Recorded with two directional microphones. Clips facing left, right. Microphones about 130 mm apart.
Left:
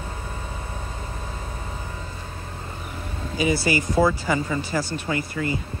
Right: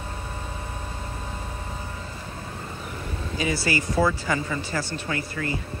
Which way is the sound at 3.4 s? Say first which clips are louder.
Left 4 dB; 15° left (ahead or behind).